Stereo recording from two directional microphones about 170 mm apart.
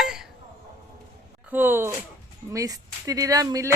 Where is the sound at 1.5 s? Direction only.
10° right (ahead or behind).